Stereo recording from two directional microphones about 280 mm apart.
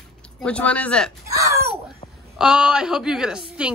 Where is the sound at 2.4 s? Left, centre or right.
Centre.